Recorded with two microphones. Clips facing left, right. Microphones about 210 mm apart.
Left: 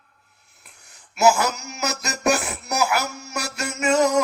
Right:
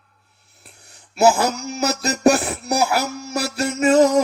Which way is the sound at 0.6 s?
30° right (ahead or behind).